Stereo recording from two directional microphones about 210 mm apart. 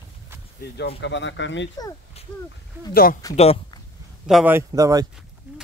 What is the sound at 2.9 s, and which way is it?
Speech, 45° left (ahead or behind).